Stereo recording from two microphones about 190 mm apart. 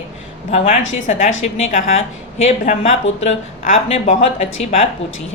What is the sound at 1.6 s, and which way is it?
A woman's voice, 35° left (ahead or behind).